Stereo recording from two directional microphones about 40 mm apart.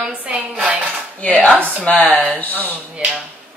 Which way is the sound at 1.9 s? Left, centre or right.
Left.